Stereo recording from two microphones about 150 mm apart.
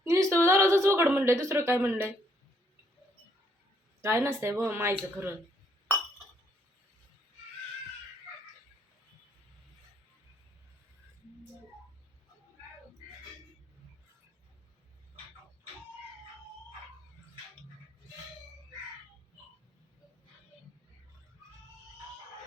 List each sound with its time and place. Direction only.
0.0 s a woman's voice: 20° right (ahead or behind)
4.0 s speech: 20° right (ahead or behind)